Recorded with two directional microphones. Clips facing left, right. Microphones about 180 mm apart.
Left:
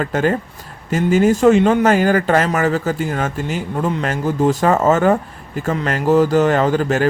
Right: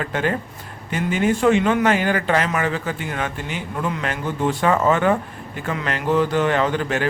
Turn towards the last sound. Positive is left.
turn(degrees=40)  # may be behind; listen again after turning